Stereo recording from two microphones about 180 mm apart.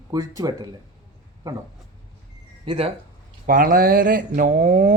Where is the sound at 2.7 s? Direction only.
30° right (ahead or behind).